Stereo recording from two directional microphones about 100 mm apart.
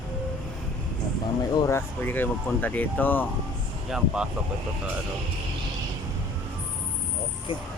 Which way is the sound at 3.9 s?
10° right (ahead or behind).